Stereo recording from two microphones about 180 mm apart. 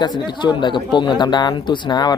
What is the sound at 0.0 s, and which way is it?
A man's voice, 25° left (ahead or behind).